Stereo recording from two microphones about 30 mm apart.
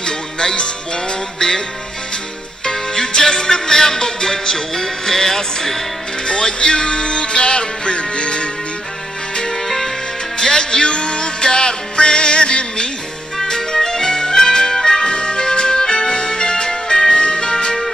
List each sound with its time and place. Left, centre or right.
0.0 s music: left
2.6 s music: left
10.4 s music: left
13.4 s music: centre